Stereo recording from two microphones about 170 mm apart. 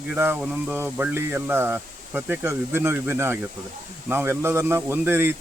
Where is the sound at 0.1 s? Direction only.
10° right (ahead or behind).